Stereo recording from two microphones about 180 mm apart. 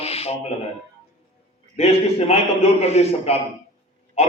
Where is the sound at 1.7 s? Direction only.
35° left (ahead or behind).